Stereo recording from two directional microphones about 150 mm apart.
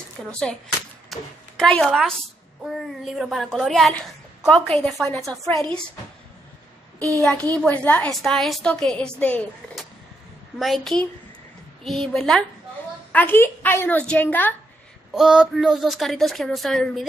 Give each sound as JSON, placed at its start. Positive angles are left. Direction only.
{"t": 0.2, "sound": "a child's voice", "side_deg": 5}
{"t": 7.2, "sound": "a child's voice", "side_deg": 0}
{"t": 10.6, "sound": "a child's voice", "side_deg": 0}
{"t": 15.1, "sound": "a child's voice", "side_deg": -5}